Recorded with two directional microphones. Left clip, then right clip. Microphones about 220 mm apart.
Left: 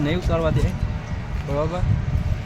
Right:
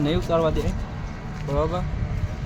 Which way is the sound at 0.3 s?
Centre (ahead or behind).